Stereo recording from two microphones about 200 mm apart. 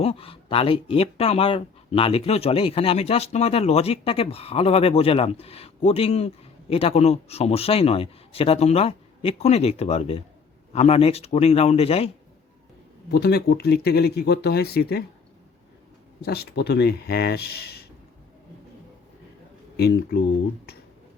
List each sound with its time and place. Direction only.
0.0 s speech: 30° left (ahead or behind)
13.1 s speech: 50° left (ahead or behind)
16.2 s speech: 50° left (ahead or behind)
19.7 s speech: 55° left (ahead or behind)